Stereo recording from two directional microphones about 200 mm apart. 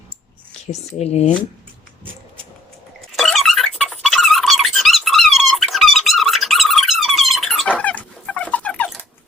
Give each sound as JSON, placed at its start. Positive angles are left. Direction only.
{"t": 0.7, "sound": "speech", "side_deg": 35}
{"t": 3.2, "sound": "squeak", "side_deg": 0}